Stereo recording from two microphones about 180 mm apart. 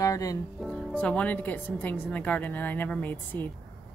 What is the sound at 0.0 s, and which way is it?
Music, 20° left (ahead or behind).